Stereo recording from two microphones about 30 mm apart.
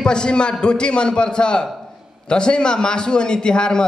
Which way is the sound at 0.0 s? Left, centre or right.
Left.